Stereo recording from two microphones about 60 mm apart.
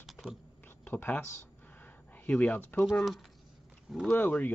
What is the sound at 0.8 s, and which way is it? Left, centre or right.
Speech, left.